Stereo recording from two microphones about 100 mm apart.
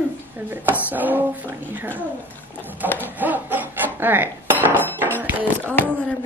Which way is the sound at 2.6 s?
20° right (ahead or behind).